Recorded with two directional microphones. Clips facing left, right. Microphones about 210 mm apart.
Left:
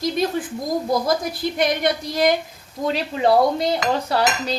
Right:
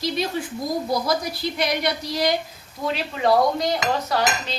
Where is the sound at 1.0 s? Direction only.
50° left (ahead or behind).